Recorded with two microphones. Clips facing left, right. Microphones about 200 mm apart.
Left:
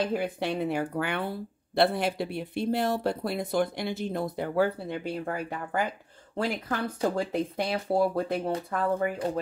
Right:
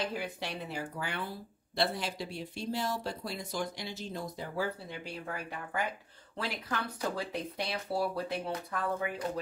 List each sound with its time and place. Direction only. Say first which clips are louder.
0.0 s speech: left 8 dB; 55° left (ahead or behind)